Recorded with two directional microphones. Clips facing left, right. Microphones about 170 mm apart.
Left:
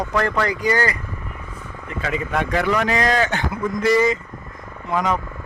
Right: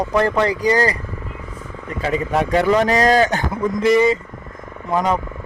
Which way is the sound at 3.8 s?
20° right (ahead or behind).